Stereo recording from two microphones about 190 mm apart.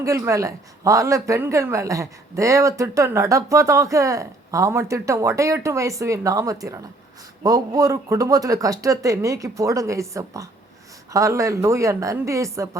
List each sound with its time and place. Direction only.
0.0 s speech: 15° right (ahead or behind)